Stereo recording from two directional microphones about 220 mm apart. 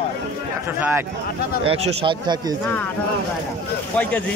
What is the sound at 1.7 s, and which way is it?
Speech, 25° right (ahead or behind).